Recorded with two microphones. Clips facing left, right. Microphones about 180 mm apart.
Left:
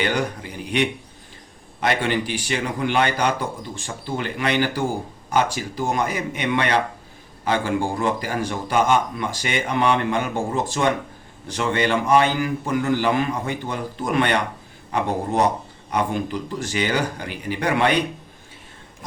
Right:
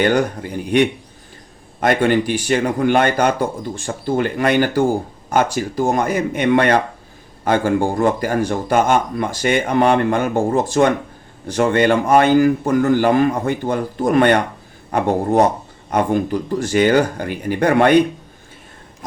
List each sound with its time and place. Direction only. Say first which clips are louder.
0.0 s speech: right 7 dB; 50° right (ahead or behind)